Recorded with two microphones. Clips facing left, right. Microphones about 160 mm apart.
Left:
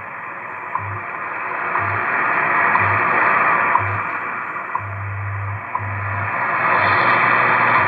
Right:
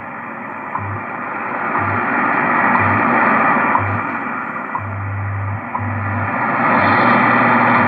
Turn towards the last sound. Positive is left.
turn(degrees=-45)  # may be behind; listen again after turning